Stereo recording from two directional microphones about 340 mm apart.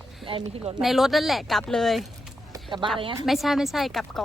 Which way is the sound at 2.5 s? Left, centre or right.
Centre.